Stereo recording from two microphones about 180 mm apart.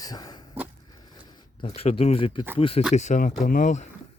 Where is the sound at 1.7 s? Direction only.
35° left (ahead or behind).